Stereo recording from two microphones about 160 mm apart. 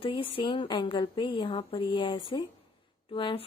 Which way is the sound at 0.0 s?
35° left (ahead or behind).